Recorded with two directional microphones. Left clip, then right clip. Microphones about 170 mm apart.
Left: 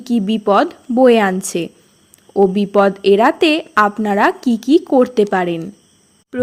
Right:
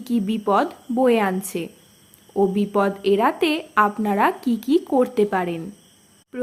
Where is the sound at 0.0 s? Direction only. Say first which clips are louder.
Left 6 dB; 25° left (ahead or behind).